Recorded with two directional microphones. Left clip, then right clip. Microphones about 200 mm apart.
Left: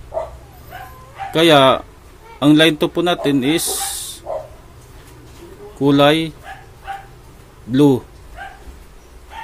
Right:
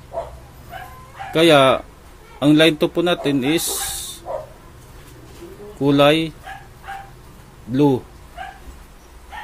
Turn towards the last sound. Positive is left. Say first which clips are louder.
# left 3 dB
turn(degrees=15)  # may be behind; listen again after turning